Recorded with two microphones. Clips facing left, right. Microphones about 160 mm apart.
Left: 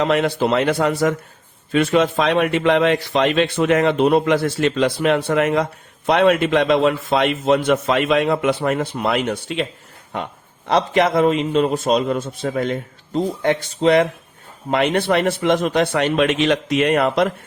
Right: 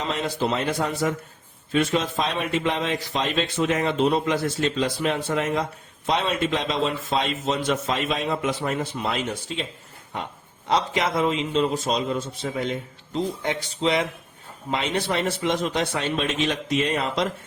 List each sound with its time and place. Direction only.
0.0 s a man's voice: 70° left (ahead or behind)
10.7 s a man's voice: 60° left (ahead or behind)